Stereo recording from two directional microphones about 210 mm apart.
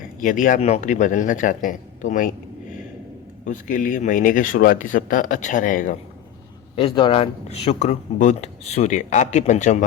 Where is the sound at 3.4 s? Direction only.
40° left (ahead or behind).